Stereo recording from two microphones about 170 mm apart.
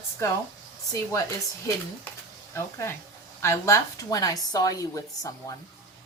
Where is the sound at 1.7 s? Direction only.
20° left (ahead or behind).